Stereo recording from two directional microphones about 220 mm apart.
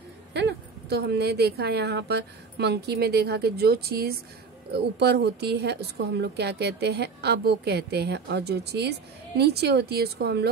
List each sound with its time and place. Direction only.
0.3 s a woman's voice: 50° right (ahead or behind)